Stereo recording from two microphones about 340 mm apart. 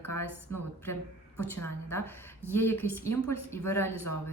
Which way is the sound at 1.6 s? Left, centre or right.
Centre.